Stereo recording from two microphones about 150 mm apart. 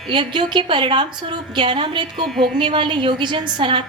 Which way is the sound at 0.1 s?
30° right (ahead or behind).